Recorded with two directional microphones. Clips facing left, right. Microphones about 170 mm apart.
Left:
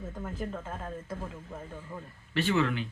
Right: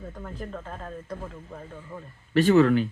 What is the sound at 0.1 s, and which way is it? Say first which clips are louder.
Speech: left 2 dB; 5° left (ahead or behind).